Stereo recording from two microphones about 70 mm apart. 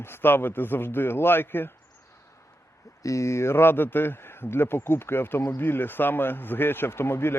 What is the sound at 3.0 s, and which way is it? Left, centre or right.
A man's voice, left.